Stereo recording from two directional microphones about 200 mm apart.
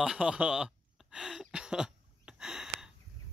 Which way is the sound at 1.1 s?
Centre (ahead or behind).